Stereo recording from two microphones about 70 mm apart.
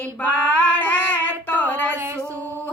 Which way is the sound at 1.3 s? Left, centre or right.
Left.